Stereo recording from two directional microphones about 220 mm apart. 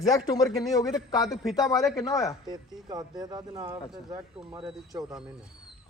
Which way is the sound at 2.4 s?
20° right (ahead or behind).